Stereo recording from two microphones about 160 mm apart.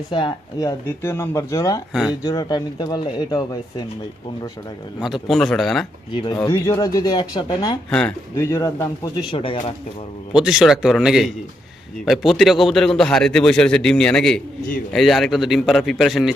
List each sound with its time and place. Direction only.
0.1 s speech: 30° left (ahead or behind)
0.9 s a man's voice: 15° left (ahead or behind)
5.0 s a man's voice: centre (ahead or behind)
6.3 s a man's voice: 20° left (ahead or behind)
7.9 s speech: 5° left (ahead or behind)
8.4 s a man's voice: 20° left (ahead or behind)
9.1 s speech: 35° left (ahead or behind)
10.4 s a man's voice: 5° right (ahead or behind)